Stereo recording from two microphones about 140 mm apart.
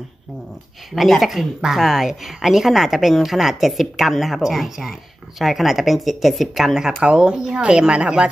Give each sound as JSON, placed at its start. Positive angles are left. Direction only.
{"t": 0.9, "sound": "a woman's voice", "side_deg": 0}